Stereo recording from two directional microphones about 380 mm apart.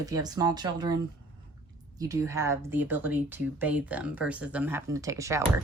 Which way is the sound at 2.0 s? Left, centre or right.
Centre.